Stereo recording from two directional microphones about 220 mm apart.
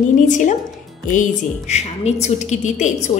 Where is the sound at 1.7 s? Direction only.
30° left (ahead or behind).